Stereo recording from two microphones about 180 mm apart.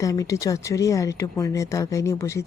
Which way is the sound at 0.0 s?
20° left (ahead or behind).